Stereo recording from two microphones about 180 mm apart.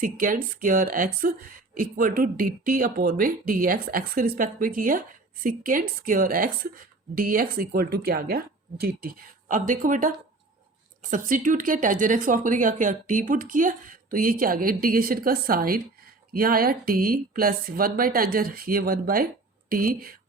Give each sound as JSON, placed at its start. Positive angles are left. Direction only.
{"t": 0.0, "sound": "speech", "side_deg": -50}